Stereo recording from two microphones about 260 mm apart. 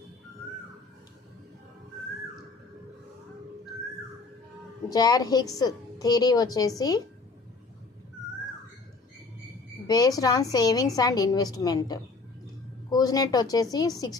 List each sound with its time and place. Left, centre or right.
4.9 s a woman's voice: centre
9.8 s a woman's voice: centre